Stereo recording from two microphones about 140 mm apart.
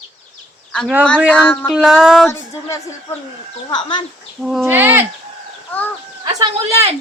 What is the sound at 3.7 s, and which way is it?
Speech, 35° left (ahead or behind).